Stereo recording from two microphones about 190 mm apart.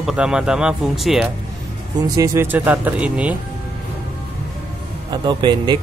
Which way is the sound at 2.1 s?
15° right (ahead or behind).